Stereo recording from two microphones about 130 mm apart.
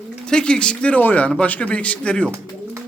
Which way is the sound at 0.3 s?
5° left (ahead or behind).